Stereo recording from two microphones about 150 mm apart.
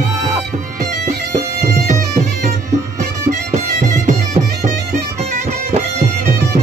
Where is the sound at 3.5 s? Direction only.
50° right (ahead or behind).